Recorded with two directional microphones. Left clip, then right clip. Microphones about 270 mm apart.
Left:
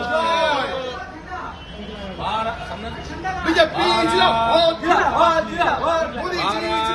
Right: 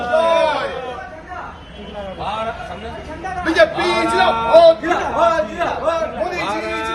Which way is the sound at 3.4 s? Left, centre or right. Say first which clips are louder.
Right 3 dB; centre.